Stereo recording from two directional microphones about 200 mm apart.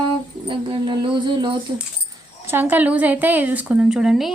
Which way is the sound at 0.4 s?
25° right (ahead or behind).